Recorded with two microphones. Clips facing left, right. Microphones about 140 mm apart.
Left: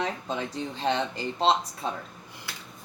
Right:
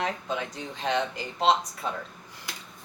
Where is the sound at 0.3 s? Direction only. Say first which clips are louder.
Left 1 dB; 30° left (ahead or behind).